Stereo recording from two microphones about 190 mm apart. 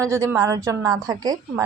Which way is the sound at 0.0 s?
15° right (ahead or behind).